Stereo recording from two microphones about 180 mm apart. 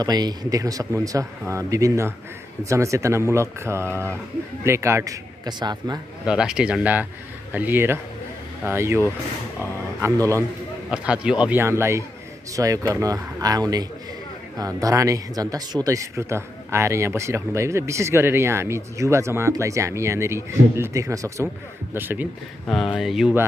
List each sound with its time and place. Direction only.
0.0 s a man's voice: 20° right (ahead or behind)
6.2 s speech: 5° right (ahead or behind)
10.1 s a man's voice: 10° left (ahead or behind)
10.9 s a man's voice: 5° right (ahead or behind)